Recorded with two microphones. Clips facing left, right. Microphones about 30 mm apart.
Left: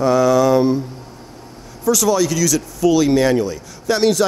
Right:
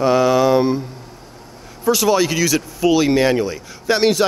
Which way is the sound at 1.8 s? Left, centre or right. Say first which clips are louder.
Even; right.